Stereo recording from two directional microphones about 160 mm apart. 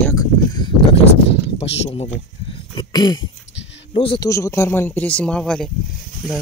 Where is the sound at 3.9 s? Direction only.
35° left (ahead or behind).